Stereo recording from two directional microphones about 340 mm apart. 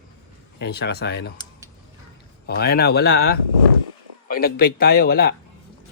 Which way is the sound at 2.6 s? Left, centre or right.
Left.